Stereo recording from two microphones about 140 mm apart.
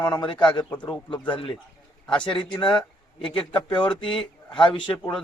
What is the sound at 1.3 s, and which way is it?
A man's voice, 40° left (ahead or behind).